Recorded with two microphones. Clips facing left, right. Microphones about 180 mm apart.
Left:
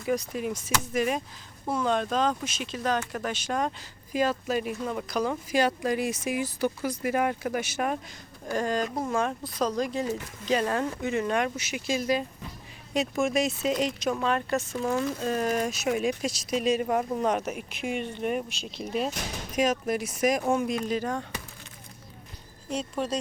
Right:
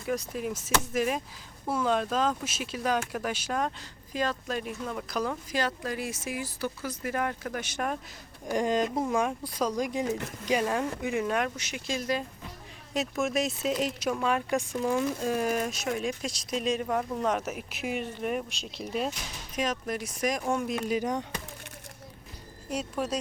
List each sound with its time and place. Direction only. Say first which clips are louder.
0.0 s speech: left 3 dB; centre (ahead or behind)
8.4 s speech: right 1 dB; 20° right (ahead or behind); by 16.8 s 5° left (ahead or behind)
16.8 s speech: left 3 dB; 20° left (ahead or behind)
17.2 s speech: left 2 dB; centre (ahead or behind)
20.8 s speech: even; 15° right (ahead or behind)
22.8 s speech: left 1 dB; 5° right (ahead or behind)